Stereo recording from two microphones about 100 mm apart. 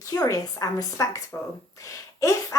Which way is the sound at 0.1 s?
30° left (ahead or behind).